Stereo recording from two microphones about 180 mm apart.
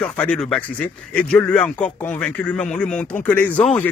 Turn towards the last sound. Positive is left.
turn(degrees=5)  # may be behind; listen again after turning